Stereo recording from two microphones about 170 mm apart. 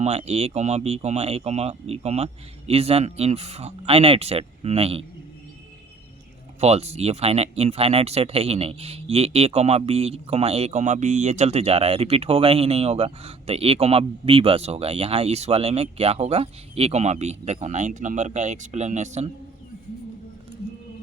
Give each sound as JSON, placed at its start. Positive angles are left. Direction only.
{"t": 0.0, "sound": "speech", "side_deg": -40}
{"t": 6.6, "sound": "speech", "side_deg": -40}